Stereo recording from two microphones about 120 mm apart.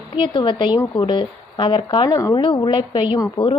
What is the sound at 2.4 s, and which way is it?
Speech, 45° left (ahead or behind).